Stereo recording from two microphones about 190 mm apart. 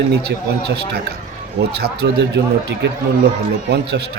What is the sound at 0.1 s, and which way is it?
Speech, 60° right (ahead or behind).